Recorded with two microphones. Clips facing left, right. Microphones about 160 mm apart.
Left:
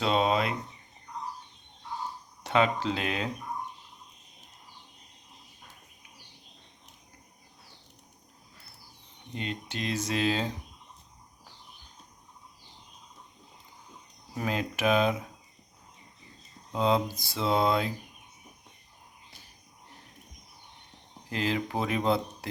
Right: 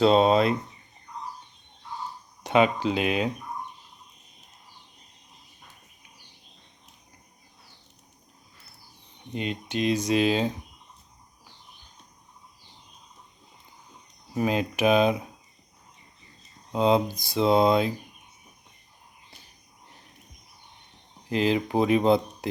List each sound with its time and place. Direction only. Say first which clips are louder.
0.0 s speech: right 7 dB; 35° right (ahead or behind)
2.4 s speech: right 4 dB; 15° right (ahead or behind)
9.3 s speech: right 6 dB; 20° right (ahead or behind)
14.3 s speech: right 6 dB; 20° right (ahead or behind)
16.7 s speech: right 4 dB; 20° right (ahead or behind)
21.2 s speech: right 6 dB; 20° right (ahead or behind)